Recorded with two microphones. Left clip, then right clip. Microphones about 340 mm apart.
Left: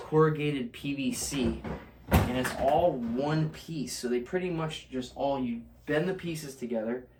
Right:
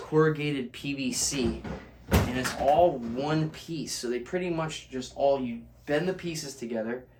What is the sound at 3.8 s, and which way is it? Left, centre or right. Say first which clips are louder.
Speech: left 1 dB; centre.